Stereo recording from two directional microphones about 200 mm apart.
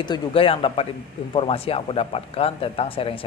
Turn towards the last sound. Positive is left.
turn(degrees=25)  # may be behind; listen again after turning